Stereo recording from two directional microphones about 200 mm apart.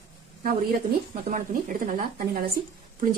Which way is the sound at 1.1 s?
45° right (ahead or behind).